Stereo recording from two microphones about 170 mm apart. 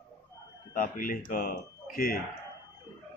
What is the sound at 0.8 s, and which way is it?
Speech, 55° left (ahead or behind).